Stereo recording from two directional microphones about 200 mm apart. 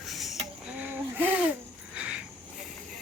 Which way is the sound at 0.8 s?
10° right (ahead or behind).